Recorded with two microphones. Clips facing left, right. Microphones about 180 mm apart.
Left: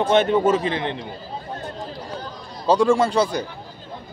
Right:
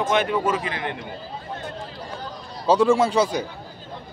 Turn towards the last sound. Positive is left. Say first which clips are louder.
# even
turn(degrees=-10)  # may be behind; listen again after turning